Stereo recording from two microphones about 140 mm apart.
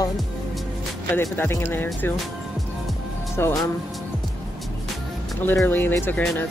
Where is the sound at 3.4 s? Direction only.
15° left (ahead or behind).